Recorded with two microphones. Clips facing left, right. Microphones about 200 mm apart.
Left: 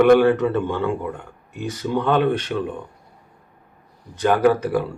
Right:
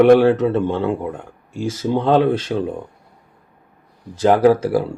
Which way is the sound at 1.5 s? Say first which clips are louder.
Right 4 dB; 90° right.